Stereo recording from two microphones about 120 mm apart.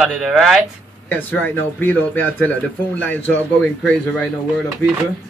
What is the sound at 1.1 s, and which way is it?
A man's voice, 15° left (ahead or behind).